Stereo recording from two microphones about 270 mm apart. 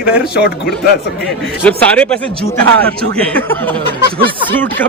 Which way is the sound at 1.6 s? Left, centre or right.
Centre.